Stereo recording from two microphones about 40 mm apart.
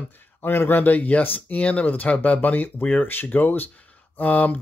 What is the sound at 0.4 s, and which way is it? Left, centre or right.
Speech, left.